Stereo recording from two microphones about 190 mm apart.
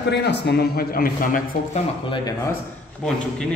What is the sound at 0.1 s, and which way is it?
A man's voice, 60° left (ahead or behind).